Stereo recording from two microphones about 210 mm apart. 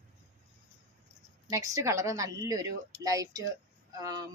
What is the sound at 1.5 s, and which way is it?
A woman's voice, 15° right (ahead or behind).